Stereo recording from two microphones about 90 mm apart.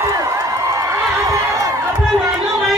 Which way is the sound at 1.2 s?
40° right (ahead or behind).